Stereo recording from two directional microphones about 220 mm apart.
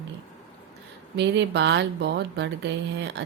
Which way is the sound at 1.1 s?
50° right (ahead or behind).